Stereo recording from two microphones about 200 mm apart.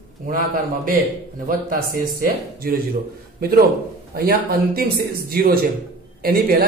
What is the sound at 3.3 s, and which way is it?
A man's voice, 50° right (ahead or behind).